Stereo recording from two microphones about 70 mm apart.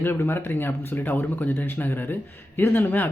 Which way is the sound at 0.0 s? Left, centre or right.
Left.